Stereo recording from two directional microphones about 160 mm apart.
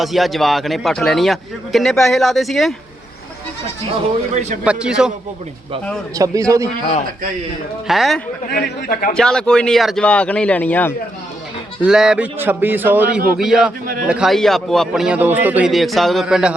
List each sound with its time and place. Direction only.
0.0 s speech: centre (ahead or behind)
4.6 s speech: 5° right (ahead or behind)
6.1 s a man's voice: 20° right (ahead or behind)
7.9 s speech: centre (ahead or behind)
8.5 s a man's voice: 70° left (ahead or behind)
9.1 s speech: 5° left (ahead or behind)
11.8 s a man's voice: 5° right (ahead or behind)